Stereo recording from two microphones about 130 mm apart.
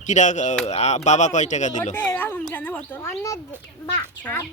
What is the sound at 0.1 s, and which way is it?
Speech, 70° left (ahead or behind).